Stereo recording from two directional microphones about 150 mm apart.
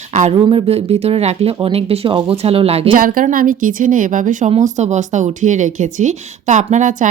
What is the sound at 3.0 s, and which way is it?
Speech, 70° right (ahead or behind).